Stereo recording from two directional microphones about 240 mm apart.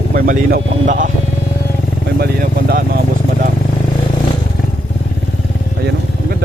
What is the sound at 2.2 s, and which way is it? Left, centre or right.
Speech, right.